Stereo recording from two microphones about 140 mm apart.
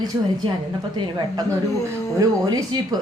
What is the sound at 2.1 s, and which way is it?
Speech, 25° right (ahead or behind).